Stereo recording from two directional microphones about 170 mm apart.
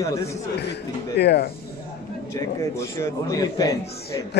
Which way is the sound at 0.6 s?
80° left.